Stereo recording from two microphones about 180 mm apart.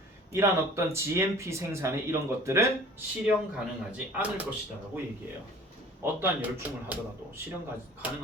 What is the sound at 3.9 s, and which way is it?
Speech, 10° right (ahead or behind).